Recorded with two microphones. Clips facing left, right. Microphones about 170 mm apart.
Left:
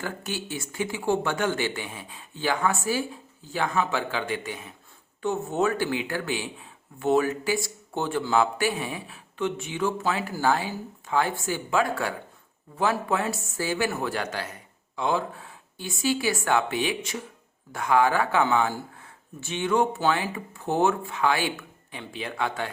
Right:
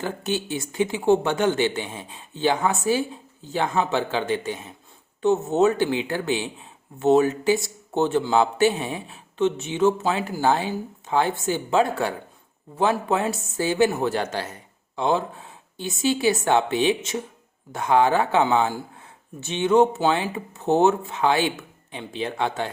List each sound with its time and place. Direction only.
0.0 s speech: 20° right (ahead or behind)